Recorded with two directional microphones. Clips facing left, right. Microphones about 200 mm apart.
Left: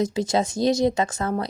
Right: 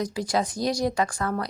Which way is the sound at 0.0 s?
25° left (ahead or behind).